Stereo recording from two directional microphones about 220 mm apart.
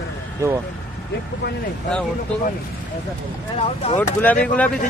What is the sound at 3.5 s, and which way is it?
Speech, 25° left (ahead or behind).